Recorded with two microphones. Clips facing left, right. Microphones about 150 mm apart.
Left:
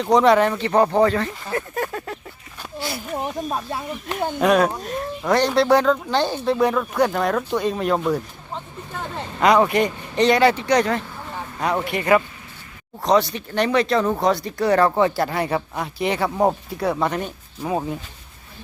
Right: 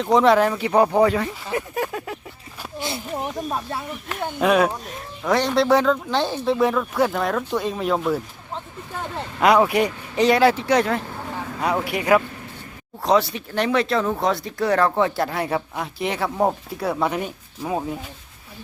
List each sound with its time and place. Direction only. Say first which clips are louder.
0.0 s speech: left 1 dB; centre (ahead or behind)
2.7 s a sound: even; 20° right (ahead or behind)
3.2 s speech: left 1 dB; 15° left (ahead or behind)
4.2 s speech: left 1 dB; centre (ahead or behind)